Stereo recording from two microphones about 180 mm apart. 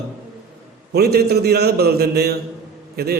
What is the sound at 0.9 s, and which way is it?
A man's voice, 60° right (ahead or behind).